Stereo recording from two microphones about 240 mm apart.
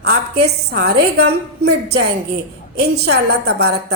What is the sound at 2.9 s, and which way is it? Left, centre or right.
A woman's voice, right.